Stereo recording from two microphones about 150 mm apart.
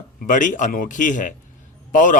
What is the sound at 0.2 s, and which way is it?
A man's voice, 60° left (ahead or behind).